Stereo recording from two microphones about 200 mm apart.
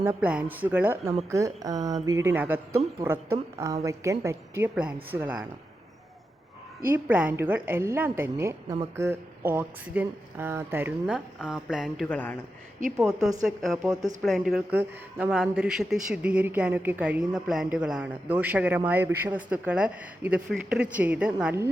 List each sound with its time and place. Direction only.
0.0 s a woman's voice: 10° right (ahead or behind)
6.8 s a woman's voice: 10° right (ahead or behind)
12.0 s speech: 10° left (ahead or behind)
14.2 s a woman's voice: centre (ahead or behind)